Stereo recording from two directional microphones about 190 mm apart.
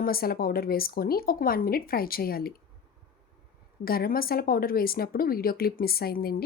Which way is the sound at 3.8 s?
50° left (ahead or behind).